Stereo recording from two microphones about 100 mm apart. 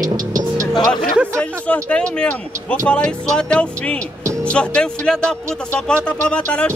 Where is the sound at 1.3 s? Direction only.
10° left (ahead or behind).